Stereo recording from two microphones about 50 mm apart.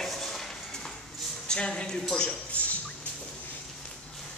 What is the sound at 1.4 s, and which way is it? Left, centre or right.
Speech, centre.